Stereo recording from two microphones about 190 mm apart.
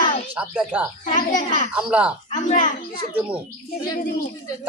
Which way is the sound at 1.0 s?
40° left (ahead or behind).